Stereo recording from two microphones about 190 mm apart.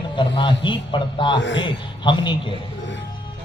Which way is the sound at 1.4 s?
70° left (ahead or behind).